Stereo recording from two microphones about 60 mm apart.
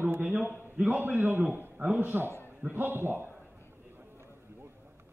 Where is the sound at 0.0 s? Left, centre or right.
Right.